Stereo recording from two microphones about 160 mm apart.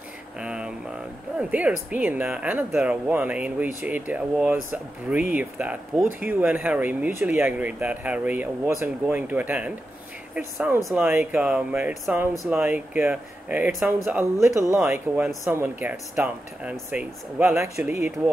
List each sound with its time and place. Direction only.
0.4 s a sound: 5° right (ahead or behind)
1.5 s speech: 10° right (ahead or behind)
14.4 s speech: 20° right (ahead or behind)